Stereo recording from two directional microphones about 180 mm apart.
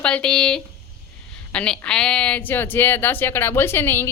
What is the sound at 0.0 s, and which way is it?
Speech, 5° left (ahead or behind).